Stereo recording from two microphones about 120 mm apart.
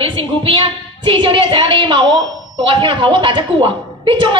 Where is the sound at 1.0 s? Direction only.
45° right (ahead or behind).